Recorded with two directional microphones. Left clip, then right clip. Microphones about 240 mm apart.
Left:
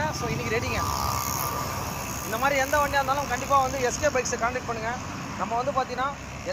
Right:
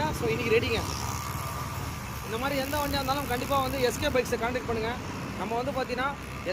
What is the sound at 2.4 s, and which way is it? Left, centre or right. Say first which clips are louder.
Speech: left 7 dB; centre.